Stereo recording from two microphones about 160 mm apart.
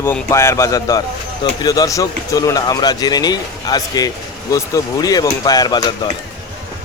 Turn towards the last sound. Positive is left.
turn(degrees=25)  # may be behind; listen again after turning